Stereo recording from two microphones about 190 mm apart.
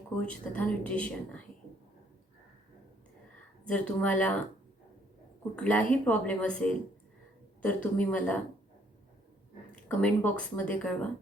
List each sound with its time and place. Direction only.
0.2 s speech: 5° left (ahead or behind)
3.7 s speech: 5° left (ahead or behind)
5.5 s speech: 5° left (ahead or behind)
9.7 s speech: 5° left (ahead or behind)